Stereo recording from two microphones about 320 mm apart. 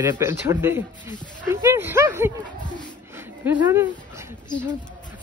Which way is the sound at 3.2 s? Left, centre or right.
Centre.